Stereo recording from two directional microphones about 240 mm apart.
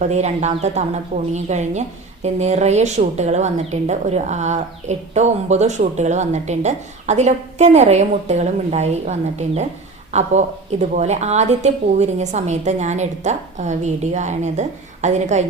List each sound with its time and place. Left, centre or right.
0.0 s speech: right